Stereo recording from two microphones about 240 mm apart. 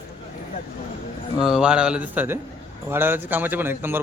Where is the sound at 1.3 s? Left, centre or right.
Centre.